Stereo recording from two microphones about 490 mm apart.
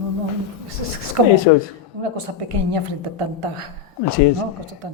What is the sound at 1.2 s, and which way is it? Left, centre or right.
Speech, right.